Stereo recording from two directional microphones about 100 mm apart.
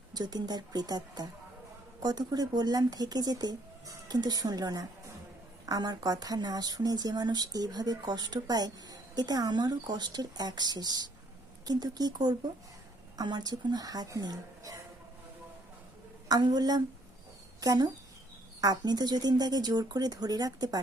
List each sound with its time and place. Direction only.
0.1 s speech: 40° right (ahead or behind)
16.3 s speech: 40° right (ahead or behind)